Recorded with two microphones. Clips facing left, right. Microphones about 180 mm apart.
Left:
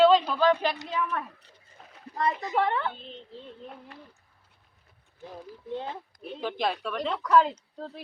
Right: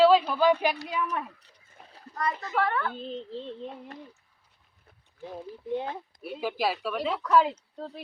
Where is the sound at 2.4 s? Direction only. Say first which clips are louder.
Left 1 dB; 15° left (ahead or behind).